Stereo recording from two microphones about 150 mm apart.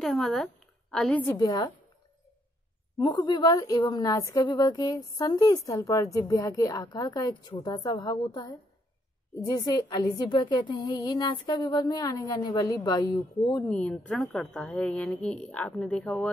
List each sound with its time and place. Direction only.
0.0 s speech: centre (ahead or behind)
1.2 s a woman's voice: 25° left (ahead or behind)
3.0 s a woman's voice: 30° left (ahead or behind)
13.7 s a woman's voice: 10° left (ahead or behind)